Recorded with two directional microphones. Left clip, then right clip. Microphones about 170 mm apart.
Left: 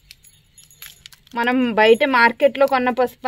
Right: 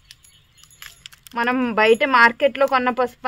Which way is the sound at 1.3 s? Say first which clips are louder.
Left 2 dB; 30° left (ahead or behind).